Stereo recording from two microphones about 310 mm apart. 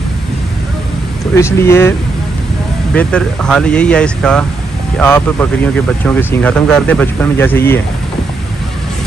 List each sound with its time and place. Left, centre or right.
1.3 s speech: centre